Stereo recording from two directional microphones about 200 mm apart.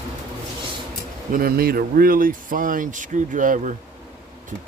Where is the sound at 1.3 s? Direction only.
50° right (ahead or behind).